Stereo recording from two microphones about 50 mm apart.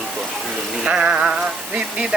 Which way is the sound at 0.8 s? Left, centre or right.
Centre.